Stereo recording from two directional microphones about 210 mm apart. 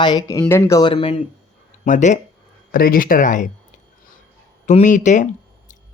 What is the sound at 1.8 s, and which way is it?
Speech, 35° left (ahead or behind).